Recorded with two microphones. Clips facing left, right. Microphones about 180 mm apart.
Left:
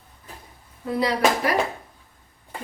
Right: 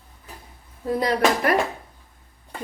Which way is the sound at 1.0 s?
45° right (ahead or behind).